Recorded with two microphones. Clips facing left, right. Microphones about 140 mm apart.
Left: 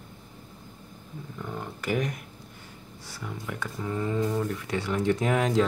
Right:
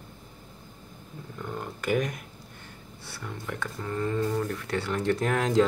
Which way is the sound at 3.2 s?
10° left (ahead or behind).